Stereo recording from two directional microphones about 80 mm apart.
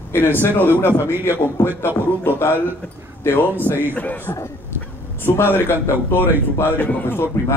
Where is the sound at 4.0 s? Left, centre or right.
Centre.